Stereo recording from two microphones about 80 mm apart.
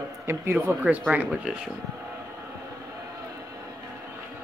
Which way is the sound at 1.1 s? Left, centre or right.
Right.